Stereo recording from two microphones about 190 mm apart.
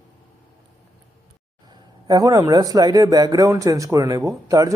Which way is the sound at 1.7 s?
20° right (ahead or behind).